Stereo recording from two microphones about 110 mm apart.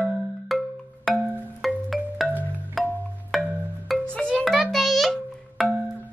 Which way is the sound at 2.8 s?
Centre (ahead or behind).